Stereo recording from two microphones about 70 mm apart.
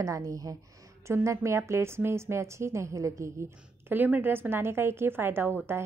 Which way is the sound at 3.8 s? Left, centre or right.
Right.